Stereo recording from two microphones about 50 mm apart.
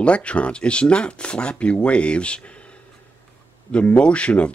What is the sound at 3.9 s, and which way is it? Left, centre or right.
Speech, left.